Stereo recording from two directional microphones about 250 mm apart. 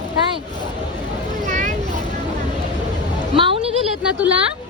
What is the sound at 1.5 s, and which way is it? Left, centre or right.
Vehicle, right.